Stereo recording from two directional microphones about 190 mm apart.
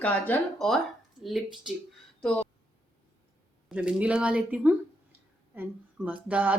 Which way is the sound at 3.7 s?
5° right (ahead or behind).